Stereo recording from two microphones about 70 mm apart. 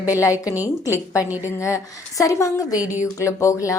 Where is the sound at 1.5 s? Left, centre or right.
Left.